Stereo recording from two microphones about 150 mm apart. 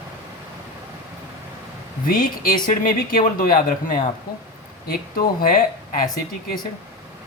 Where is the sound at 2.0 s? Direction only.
70° left (ahead or behind).